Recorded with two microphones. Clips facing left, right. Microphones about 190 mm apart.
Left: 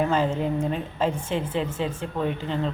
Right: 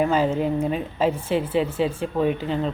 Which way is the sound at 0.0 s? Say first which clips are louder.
Right 3 dB; 10° right (ahead or behind).